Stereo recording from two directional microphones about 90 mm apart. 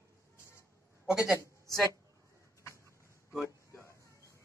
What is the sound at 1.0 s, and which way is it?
Speech, 5° right (ahead or behind).